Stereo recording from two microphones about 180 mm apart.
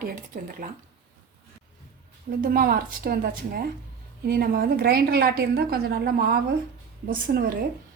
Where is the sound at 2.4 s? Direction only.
55° right (ahead or behind).